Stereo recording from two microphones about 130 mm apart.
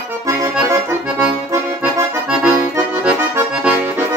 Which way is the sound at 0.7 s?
15° right (ahead or behind).